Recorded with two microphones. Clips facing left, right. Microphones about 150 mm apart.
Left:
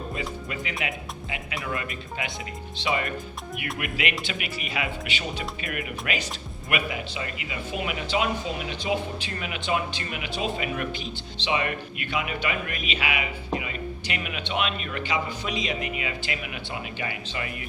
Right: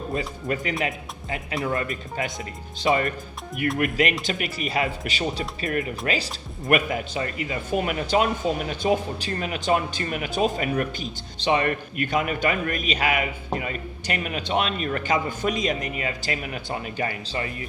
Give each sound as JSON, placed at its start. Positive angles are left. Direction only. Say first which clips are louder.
{"t": 0.1, "sound": "speech", "louder": "right 5 dB", "side_deg": -45}
{"t": 6.7, "sound": "speech", "louder": "right 7 dB", "side_deg": -45}